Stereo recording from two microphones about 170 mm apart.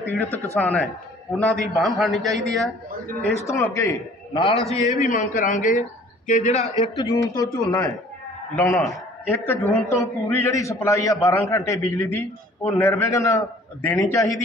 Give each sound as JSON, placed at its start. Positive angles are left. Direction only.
{"t": 0.6, "sound": "a man's voice", "side_deg": 5}
{"t": 3.2, "sound": "a man's voice", "side_deg": 15}
{"t": 4.3, "sound": "a man's voice", "side_deg": 30}
{"t": 5.0, "sound": "speech", "side_deg": 50}
{"t": 7.0, "sound": "a man's voice", "side_deg": 20}
{"t": 8.5, "sound": "a man's voice", "side_deg": 15}